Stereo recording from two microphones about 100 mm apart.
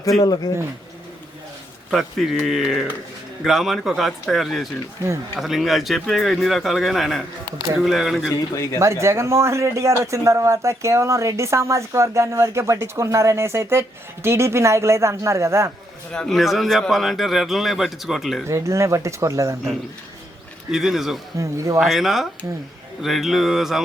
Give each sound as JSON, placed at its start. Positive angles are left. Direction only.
{"t": 0.2, "sound": "a man's voice", "side_deg": 40}
{"t": 1.9, "sound": "speech", "side_deg": 0}
{"t": 8.5, "sound": "a man's voice", "side_deg": 30}
{"t": 8.8, "sound": "speech", "side_deg": -30}
{"t": 16.1, "sound": "speech", "side_deg": 5}
{"t": 18.4, "sound": "speech", "side_deg": -30}
{"t": 20.7, "sound": "speech", "side_deg": -5}
{"t": 21.3, "sound": "speech", "side_deg": -30}
{"t": 21.8, "sound": "speech", "side_deg": 0}